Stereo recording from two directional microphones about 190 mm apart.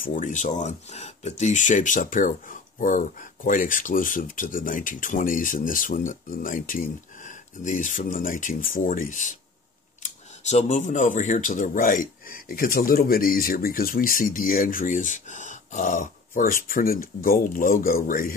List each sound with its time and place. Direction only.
0.0 s speech: 45° left (ahead or behind)